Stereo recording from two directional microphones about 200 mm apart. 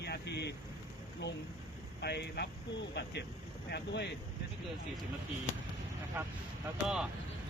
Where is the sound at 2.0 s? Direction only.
55° left (ahead or behind).